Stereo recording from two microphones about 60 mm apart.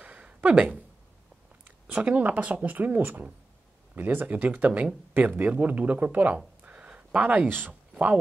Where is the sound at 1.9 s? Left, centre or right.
Right.